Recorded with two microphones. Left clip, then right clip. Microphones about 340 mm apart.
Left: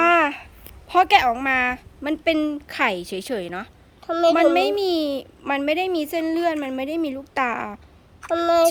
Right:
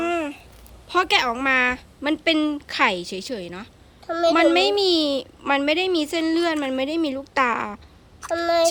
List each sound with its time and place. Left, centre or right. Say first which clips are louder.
0.1 s a sound: left 8 dB; centre
0.9 s a woman's voice: left 4 dB; centre
4.0 s a woman's voice: left 2 dB; left
4.4 s a woman's voice: even; centre
8.3 s speech: left 2 dB; left